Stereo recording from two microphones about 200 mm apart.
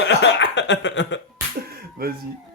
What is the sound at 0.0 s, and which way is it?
Cough, 65° left (ahead or behind).